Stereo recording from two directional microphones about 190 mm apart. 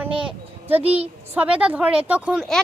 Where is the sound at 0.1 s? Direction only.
25° right (ahead or behind).